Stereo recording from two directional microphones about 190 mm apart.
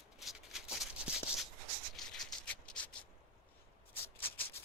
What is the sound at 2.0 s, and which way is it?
Rub, centre (ahead or behind).